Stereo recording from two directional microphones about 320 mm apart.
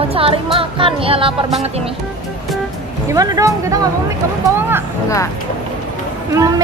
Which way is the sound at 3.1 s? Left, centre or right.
Centre.